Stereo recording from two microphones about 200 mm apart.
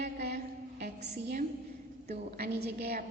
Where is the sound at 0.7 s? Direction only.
55° right (ahead or behind).